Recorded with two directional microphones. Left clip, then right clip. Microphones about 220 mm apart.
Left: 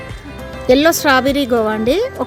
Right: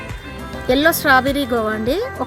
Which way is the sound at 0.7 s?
45° left (ahead or behind).